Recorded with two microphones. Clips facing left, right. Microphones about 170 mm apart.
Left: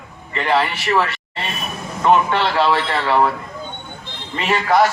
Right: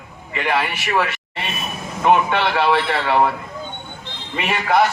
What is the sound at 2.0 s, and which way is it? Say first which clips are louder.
A man's voice: left 1 dB; 15° right (ahead or behind).